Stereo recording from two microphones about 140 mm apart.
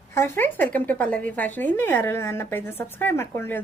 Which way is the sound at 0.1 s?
15° left (ahead or behind).